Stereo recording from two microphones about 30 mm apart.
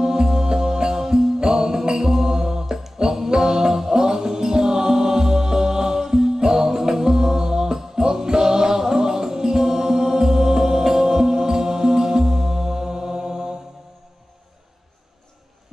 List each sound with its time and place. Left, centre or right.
0.0 s music: right